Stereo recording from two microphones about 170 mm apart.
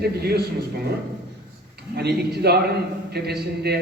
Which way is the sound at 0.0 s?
65° right (ahead or behind).